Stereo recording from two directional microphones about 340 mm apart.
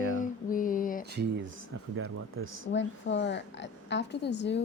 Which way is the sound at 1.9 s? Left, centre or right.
Right.